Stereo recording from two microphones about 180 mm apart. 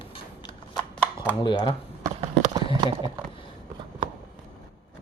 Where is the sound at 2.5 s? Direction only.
20° right (ahead or behind).